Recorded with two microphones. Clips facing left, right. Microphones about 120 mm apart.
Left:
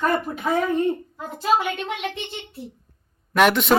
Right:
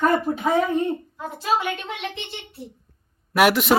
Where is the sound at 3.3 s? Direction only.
5° right (ahead or behind).